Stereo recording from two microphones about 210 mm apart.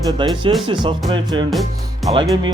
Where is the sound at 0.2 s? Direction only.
25° right (ahead or behind).